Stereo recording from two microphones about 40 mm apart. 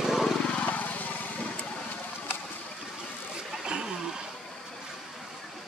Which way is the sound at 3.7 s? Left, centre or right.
Centre.